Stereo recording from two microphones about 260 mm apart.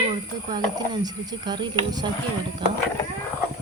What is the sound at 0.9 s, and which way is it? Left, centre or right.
Speech, centre.